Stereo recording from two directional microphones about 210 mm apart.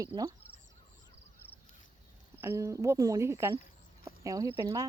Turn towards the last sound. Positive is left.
turn(degrees=-15)  # may be behind; listen again after turning